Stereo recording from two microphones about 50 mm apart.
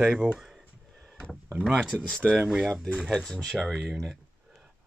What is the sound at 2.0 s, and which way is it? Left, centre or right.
Speech, centre.